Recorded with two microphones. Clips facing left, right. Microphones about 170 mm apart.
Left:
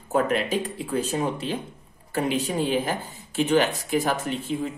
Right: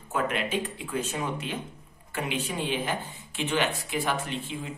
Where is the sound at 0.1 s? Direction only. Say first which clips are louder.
Left 5 dB; 35° left (ahead or behind).